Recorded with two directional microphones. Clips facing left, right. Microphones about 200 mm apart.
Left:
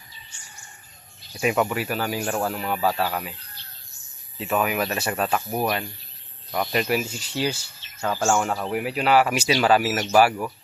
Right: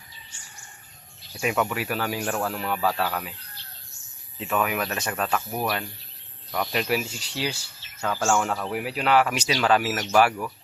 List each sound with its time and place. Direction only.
1.4 s speech: 5° left (ahead or behind)
2.2 s speech: 20° left (ahead or behind)
2.5 s speech: 5° left (ahead or behind)
4.4 s speech: 5° left (ahead or behind)
6.5 s speech: 5° left (ahead or behind)
8.7 s speech: centre (ahead or behind)